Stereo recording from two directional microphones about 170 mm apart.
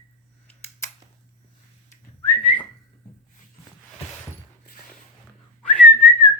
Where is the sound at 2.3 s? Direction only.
10° left (ahead or behind).